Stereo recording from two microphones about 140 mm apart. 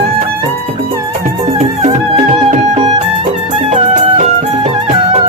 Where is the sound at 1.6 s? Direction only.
45° right (ahead or behind).